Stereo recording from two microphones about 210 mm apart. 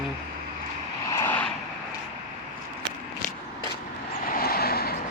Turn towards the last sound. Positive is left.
turn(degrees=45)  # may be behind; listen again after turning